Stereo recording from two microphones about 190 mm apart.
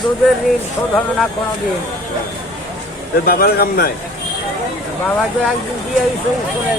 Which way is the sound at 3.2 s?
50° left (ahead or behind).